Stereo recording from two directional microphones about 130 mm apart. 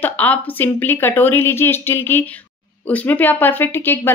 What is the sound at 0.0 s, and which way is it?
Speech, 15° left (ahead or behind).